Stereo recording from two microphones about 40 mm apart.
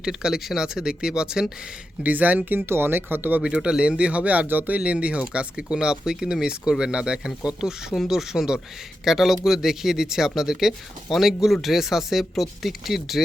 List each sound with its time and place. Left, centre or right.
0.0 s speech: centre
2.0 s speech: right
2.6 s speech: right
3.4 s speech: right
4.4 s speech: right
4.8 s speech: right; by 13.2 s centre